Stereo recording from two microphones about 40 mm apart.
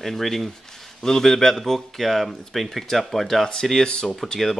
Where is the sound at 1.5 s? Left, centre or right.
Centre.